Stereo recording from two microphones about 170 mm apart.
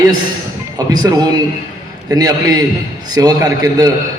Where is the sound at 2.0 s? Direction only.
20° right (ahead or behind).